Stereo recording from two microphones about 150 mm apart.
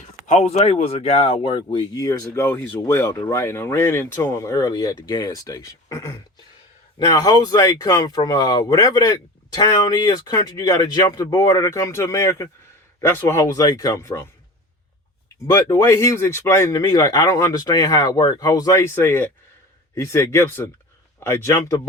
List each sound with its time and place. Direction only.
0.3 s speech: 50° left (ahead or behind); by 14.3 s 20° left (ahead or behind)
15.4 s speech: 20° left (ahead or behind)